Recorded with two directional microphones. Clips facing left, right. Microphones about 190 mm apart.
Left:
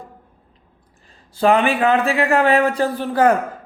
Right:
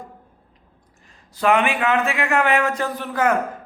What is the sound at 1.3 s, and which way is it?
A man's voice, 30° left (ahead or behind).